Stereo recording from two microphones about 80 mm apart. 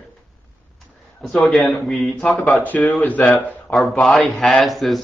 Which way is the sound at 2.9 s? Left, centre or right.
Centre.